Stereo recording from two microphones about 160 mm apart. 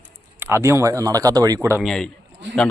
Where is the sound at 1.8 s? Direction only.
Centre (ahead or behind).